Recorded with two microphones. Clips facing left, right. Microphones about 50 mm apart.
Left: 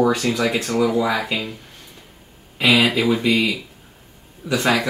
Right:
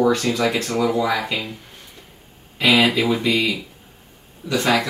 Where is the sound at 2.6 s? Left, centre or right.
Centre.